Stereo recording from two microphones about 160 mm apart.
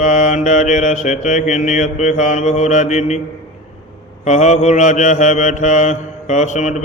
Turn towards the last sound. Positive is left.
turn(degrees=50)  # may be behind; listen again after turning